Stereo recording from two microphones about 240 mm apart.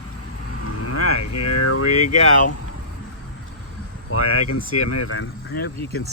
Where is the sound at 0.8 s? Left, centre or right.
Left.